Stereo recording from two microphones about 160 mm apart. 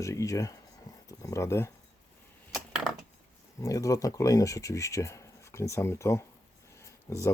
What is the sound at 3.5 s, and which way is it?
Speech, 20° left (ahead or behind).